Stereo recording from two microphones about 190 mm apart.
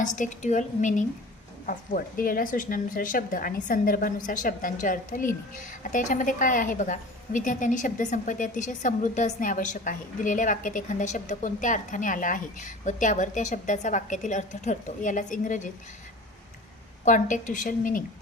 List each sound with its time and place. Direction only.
0.0 s a woman's voice: 40° left (ahead or behind)
17.1 s speech: 40° left (ahead or behind)